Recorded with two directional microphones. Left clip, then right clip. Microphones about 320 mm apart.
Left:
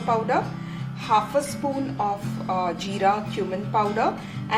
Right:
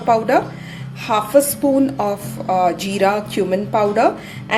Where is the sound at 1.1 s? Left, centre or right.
Right.